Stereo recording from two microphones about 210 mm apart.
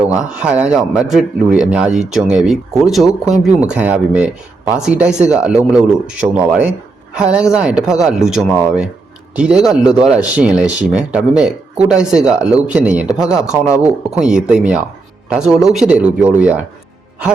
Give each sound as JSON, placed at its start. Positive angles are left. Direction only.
{"t": 0.3, "sound": "a man's voice", "side_deg": -5}